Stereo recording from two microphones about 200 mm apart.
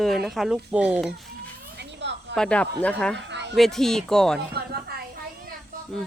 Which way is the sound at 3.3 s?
60° right (ahead or behind).